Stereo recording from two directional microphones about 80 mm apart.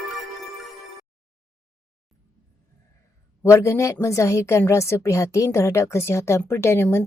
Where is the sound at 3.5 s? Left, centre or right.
Left.